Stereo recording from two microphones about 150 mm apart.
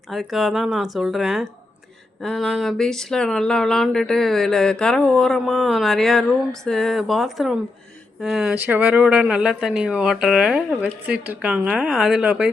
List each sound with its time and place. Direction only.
0.1 s speech: centre (ahead or behind)